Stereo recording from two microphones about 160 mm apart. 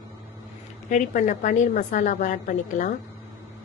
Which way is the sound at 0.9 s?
50° left (ahead or behind).